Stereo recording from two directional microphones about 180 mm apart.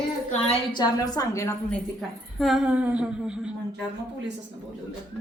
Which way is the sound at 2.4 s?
Centre (ahead or behind).